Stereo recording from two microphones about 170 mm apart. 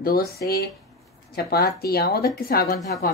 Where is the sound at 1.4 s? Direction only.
65° left (ahead or behind).